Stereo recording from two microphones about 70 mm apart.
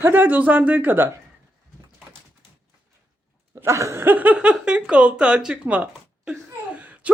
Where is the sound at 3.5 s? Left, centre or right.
Right.